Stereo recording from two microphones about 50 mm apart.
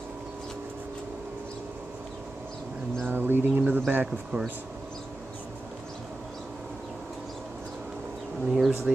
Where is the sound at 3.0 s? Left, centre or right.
Right.